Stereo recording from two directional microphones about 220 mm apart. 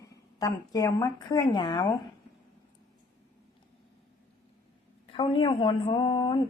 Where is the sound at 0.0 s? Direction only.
15° left (ahead or behind).